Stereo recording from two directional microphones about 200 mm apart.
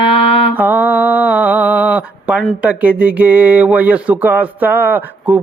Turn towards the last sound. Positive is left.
turn(degrees=-10)  # may be behind; listen again after turning